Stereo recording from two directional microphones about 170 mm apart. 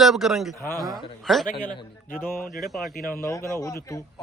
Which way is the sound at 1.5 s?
50° left (ahead or behind).